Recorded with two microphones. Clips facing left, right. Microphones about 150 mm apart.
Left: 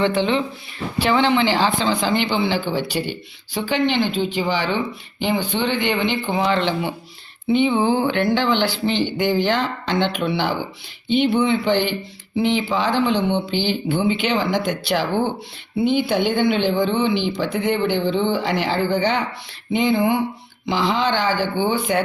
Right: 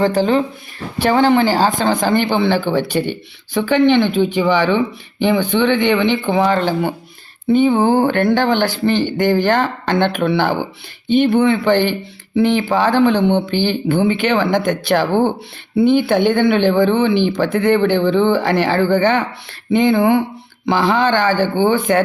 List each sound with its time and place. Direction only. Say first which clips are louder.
0.0 s speech: right 4 dB; 40° right (ahead or behind)